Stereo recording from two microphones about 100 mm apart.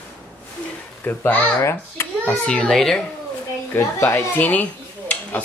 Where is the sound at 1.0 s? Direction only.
20° left (ahead or behind).